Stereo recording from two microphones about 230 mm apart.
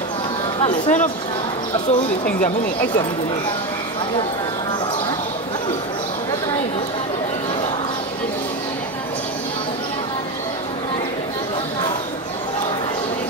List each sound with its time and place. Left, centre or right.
0.6 s speech: left